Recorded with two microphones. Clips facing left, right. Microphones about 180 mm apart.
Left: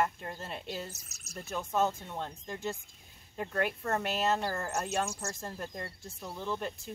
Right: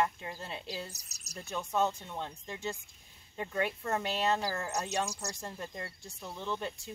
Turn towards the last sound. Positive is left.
turn(degrees=0)  # may be behind; listen again after turning